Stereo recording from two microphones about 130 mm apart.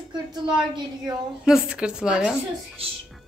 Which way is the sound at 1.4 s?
5° right (ahead or behind).